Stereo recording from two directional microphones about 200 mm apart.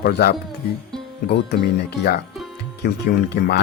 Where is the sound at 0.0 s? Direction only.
50° left (ahead or behind).